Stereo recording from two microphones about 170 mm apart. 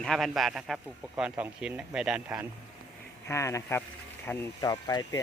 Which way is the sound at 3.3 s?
15° left (ahead or behind).